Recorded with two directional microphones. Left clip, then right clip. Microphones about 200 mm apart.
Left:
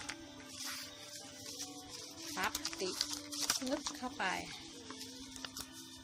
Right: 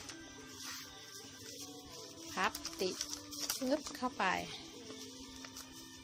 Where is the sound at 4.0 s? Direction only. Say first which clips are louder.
Right 3 dB; 30° right (ahead or behind).